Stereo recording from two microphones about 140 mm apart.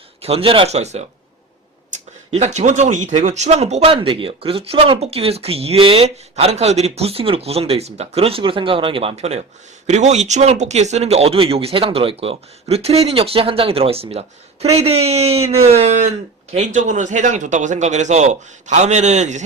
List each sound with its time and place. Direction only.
0.2 s speech: 45° right (ahead or behind)
1.9 s a sound: 60° right (ahead or behind)
2.3 s a man's voice: 55° right (ahead or behind)